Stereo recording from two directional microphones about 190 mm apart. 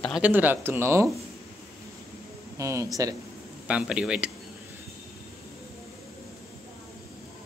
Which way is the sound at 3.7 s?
5° right (ahead or behind).